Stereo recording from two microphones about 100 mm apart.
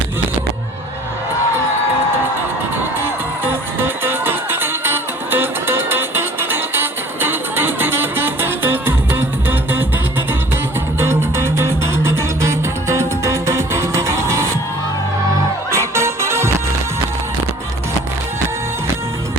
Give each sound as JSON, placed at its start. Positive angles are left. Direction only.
{"t": 3.0, "sound": "music", "side_deg": -20}
{"t": 15.7, "sound": "music", "side_deg": -25}